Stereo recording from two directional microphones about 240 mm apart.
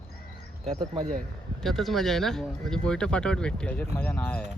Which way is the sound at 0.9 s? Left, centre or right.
Right.